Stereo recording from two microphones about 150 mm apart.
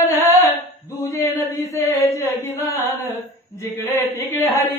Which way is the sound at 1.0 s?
20° left (ahead or behind).